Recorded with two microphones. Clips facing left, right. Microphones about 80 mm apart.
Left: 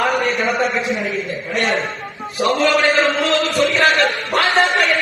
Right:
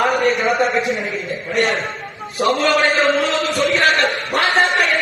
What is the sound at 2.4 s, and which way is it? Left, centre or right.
A man's voice, centre.